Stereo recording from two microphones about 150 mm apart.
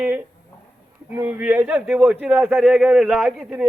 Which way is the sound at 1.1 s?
10° right (ahead or behind).